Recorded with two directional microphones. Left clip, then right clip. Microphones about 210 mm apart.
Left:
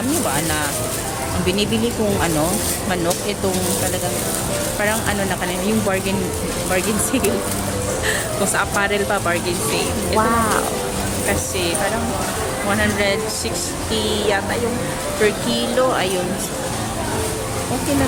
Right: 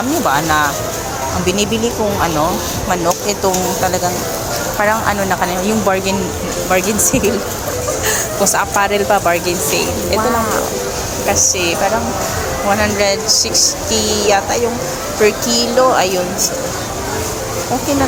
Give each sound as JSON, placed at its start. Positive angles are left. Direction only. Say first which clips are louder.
{"t": 0.3, "sound": "speech", "louder": "right 8 dB", "side_deg": 0}
{"t": 4.8, "sound": "speech", "louder": "right 7 dB", "side_deg": 5}
{"t": 6.7, "sound": "speech", "louder": "right 6 dB", "side_deg": 0}
{"t": 8.5, "sound": "speech", "louder": "right 3 dB", "side_deg": -5}
{"t": 12.7, "sound": "speech", "louder": "right 4 dB", "side_deg": 0}
{"t": 13.2, "sound": "speech", "louder": "right 10 dB", "side_deg": 15}
{"t": 13.9, "sound": "speech", "louder": "right 1 dB", "side_deg": -30}
{"t": 15.2, "sound": "speech", "louder": "right 6 dB", "side_deg": 0}